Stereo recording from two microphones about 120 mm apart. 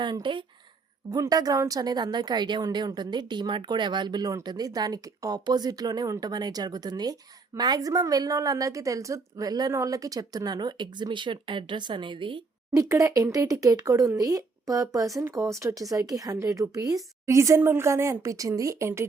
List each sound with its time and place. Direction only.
0.0 s speech: 40° right (ahead or behind)
1.1 s speech: 30° right (ahead or behind)
12.7 s speech: 30° right (ahead or behind)